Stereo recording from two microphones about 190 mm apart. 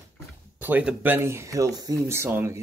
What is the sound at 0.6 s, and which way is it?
Speech, 10° right (ahead or behind).